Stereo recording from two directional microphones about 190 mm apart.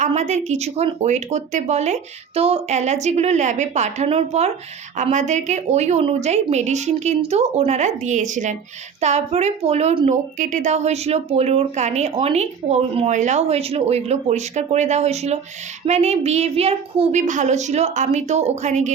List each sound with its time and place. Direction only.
0.0 s speech: 40° right (ahead or behind)